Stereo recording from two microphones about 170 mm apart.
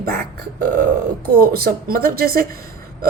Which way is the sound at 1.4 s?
60° right (ahead or behind).